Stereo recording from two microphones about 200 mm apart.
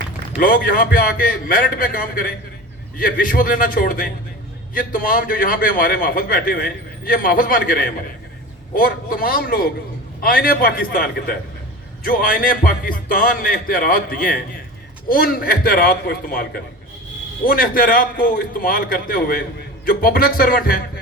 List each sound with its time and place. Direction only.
0.3 s a man's voice: 45° left (ahead or behind)